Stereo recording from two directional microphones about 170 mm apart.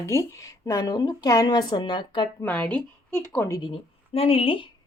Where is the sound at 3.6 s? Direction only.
35° left (ahead or behind).